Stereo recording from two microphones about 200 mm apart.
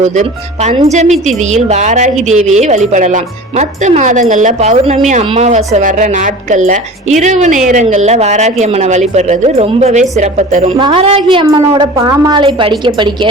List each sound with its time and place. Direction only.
0.0 s a woman's voice: 35° right (ahead or behind)
10.8 s a woman's voice: 25° right (ahead or behind)